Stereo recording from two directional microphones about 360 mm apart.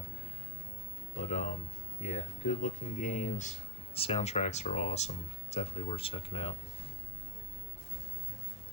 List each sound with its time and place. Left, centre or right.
1.2 s speech: centre